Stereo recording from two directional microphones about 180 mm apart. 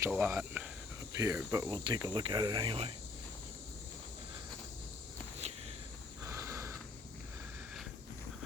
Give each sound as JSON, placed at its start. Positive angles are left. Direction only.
{"t": 0.1, "sound": "speech", "side_deg": -10}
{"t": 1.1, "sound": "cricket", "side_deg": -15}
{"t": 5.4, "sound": "walk", "side_deg": -35}
{"t": 6.2, "sound": "snort", "side_deg": -15}